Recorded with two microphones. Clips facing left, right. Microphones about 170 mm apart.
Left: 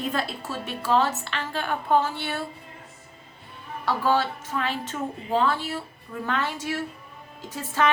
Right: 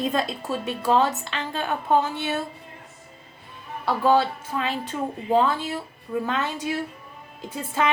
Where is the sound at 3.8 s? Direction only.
15° right (ahead or behind).